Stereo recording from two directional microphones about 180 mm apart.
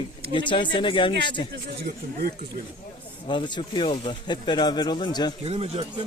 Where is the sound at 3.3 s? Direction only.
25° left (ahead or behind).